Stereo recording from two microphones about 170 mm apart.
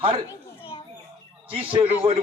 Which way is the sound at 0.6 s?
30° left (ahead or behind).